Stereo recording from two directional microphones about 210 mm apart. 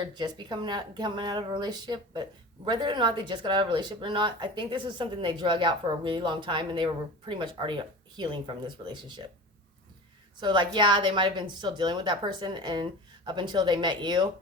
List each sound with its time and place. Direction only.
0.0 s speech: 20° right (ahead or behind)
10.4 s speech: 20° right (ahead or behind)